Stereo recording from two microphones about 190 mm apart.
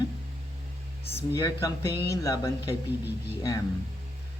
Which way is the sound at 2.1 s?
20° left (ahead or behind).